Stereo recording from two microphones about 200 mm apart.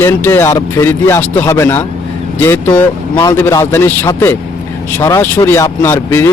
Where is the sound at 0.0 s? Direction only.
10° left (ahead or behind).